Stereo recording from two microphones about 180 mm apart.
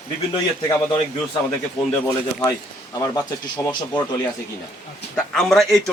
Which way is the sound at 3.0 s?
15° left (ahead or behind).